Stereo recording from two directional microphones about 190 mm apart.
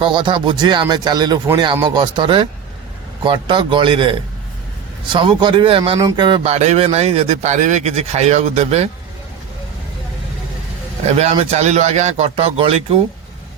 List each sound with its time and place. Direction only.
0.0 s speech: 25° right (ahead or behind)
11.2 s speech: 35° right (ahead or behind)